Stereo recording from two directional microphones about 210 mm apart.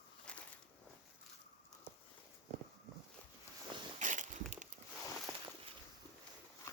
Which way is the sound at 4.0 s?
35° right (ahead or behind).